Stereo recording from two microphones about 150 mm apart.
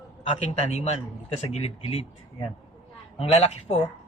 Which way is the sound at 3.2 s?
40° left (ahead or behind).